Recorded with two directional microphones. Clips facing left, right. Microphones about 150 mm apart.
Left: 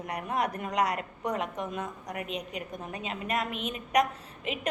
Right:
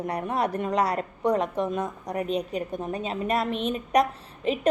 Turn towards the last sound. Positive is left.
turn(degrees=-35)  # may be behind; listen again after turning